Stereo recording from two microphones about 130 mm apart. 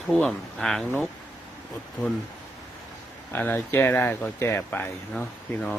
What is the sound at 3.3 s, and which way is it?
Speech, 15° left (ahead or behind).